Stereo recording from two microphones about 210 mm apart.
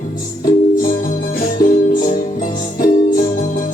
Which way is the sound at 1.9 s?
40° left (ahead or behind).